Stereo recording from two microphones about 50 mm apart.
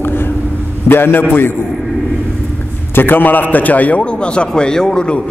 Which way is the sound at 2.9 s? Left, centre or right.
Left.